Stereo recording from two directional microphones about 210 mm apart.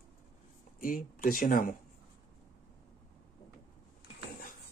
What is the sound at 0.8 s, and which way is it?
Speech, 40° left (ahead or behind).